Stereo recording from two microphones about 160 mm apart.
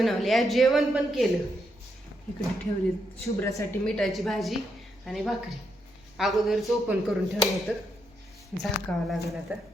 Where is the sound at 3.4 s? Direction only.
20° left (ahead or behind).